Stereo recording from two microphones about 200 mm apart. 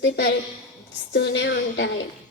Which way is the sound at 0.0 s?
55° left (ahead or behind).